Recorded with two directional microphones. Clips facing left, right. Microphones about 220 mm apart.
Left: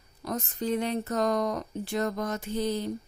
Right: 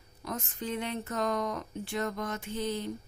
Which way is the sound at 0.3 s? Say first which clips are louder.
Left 6 dB; 40° left (ahead or behind).